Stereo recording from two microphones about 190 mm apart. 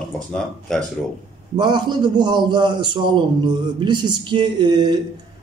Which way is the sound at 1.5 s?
25° right (ahead or behind).